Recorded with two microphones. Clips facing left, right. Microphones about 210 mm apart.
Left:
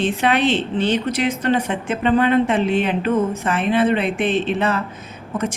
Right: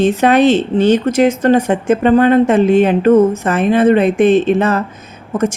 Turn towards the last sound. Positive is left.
turn(degrees=-45)  # may be behind; listen again after turning